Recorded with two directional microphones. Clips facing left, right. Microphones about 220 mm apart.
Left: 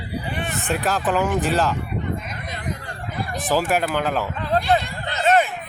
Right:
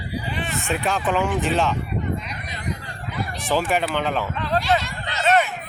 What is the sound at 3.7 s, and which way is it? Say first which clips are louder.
Speech: left 1 dB; 5° left (ahead or behind).